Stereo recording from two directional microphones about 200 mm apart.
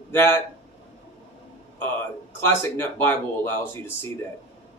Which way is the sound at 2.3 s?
10° left (ahead or behind).